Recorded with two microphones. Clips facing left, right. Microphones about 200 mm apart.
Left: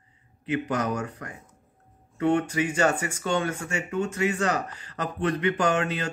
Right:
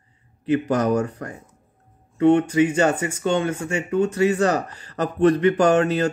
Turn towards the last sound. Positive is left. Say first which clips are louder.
# right 8 dB
turn(degrees=-40)  # may be behind; listen again after turning